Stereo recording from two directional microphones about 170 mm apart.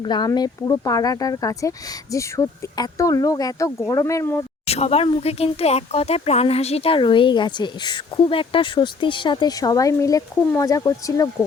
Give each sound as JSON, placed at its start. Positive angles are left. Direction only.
{"t": 0.0, "sound": "speech", "side_deg": 25}
{"t": 4.6, "sound": "speech", "side_deg": 35}